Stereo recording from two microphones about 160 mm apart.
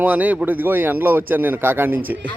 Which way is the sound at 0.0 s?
10° right (ahead or behind).